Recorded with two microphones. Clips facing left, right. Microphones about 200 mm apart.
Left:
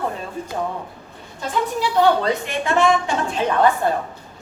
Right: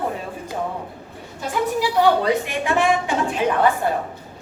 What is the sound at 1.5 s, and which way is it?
A woman's voice, 10° right (ahead or behind).